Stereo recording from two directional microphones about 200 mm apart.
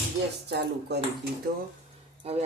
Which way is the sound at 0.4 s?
55° right (ahead or behind).